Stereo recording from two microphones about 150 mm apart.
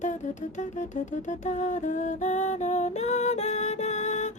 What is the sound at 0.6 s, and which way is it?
A woman's voice, 55° left (ahead or behind).